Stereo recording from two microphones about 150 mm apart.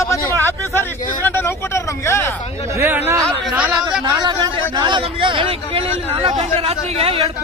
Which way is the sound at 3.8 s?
25° right (ahead or behind).